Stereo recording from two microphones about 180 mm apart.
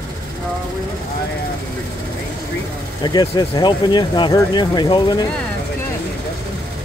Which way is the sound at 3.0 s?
25° left (ahead or behind).